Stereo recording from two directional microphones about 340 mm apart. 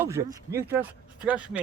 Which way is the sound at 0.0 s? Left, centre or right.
Centre.